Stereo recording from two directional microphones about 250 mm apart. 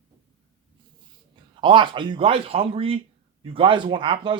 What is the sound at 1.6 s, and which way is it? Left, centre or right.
Speech, centre.